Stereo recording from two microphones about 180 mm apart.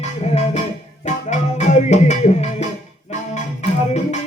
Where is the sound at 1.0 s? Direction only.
40° left (ahead or behind).